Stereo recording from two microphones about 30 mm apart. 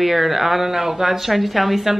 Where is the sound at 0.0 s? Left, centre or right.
Centre.